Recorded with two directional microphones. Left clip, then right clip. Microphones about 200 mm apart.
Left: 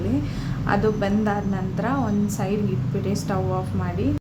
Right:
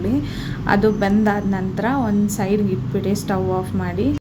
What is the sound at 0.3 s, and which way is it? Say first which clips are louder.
A woman's voice: right 6 dB; 15° right (ahead or behind).